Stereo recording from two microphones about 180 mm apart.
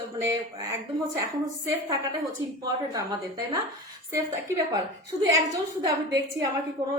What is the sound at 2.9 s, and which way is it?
A woman's voice, 20° right (ahead or behind).